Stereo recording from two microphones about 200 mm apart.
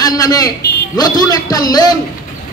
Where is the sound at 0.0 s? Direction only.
20° left (ahead or behind).